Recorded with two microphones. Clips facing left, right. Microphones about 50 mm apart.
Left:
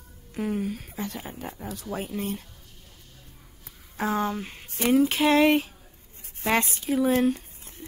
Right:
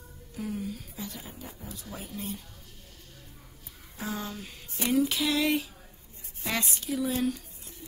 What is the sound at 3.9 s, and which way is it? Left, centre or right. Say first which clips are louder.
Speech: left 9 dB; left.